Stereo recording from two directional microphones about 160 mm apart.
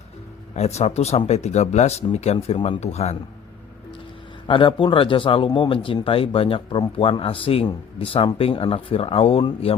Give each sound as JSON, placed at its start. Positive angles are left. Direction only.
{"t": 0.5, "sound": "speech", "side_deg": 45}
{"t": 4.4, "sound": "speech", "side_deg": 30}